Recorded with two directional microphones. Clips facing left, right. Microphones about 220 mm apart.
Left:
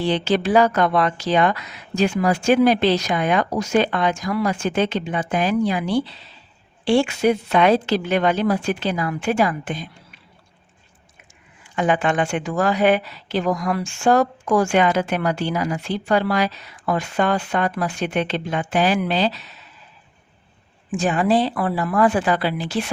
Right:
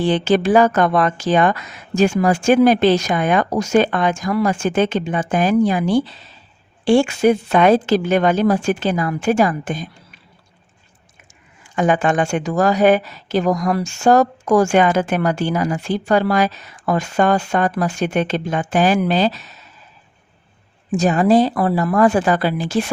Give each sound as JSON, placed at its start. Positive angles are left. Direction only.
{"t": 0.0, "sound": "speech", "side_deg": -50}
{"t": 11.6, "sound": "speech", "side_deg": -45}
{"t": 20.9, "sound": "speech", "side_deg": -40}